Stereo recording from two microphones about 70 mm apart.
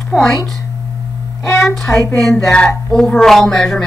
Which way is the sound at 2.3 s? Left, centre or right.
Centre.